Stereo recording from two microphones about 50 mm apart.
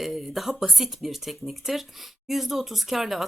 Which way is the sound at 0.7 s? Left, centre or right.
Centre.